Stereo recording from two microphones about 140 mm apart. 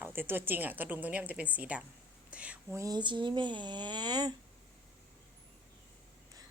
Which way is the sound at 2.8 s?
30° right (ahead or behind).